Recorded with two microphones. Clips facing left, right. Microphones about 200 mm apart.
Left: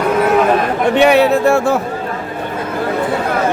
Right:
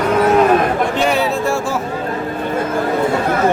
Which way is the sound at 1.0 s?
65° left (ahead or behind).